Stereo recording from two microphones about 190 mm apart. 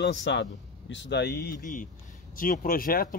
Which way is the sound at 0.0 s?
70° left (ahead or behind).